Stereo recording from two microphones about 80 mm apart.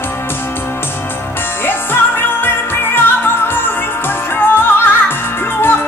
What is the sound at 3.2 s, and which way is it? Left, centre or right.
Music, left.